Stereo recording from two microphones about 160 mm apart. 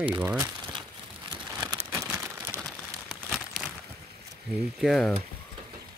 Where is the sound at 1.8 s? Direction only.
15° right (ahead or behind).